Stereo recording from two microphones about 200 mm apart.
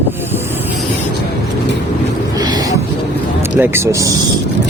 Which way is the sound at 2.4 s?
20° right (ahead or behind).